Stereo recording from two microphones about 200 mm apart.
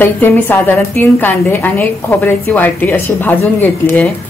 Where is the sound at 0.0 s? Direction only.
10° left (ahead or behind).